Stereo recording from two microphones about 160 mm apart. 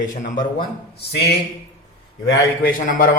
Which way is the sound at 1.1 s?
90° left.